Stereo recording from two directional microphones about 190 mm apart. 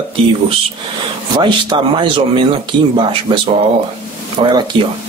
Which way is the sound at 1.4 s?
25° right (ahead or behind).